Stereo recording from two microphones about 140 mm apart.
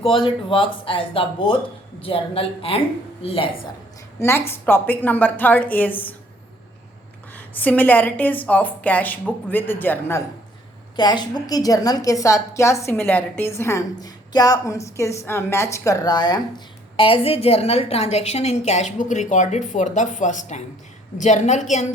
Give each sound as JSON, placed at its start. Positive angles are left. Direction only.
{"t": 0.0, "sound": "speech", "side_deg": 40}
{"t": 4.2, "sound": "a woman's voice", "side_deg": 15}
{"t": 7.3, "sound": "a woman's voice", "side_deg": 10}
{"t": 10.9, "sound": "a woman's voice", "side_deg": 30}
{"t": 17.0, "sound": "a woman's voice", "side_deg": 40}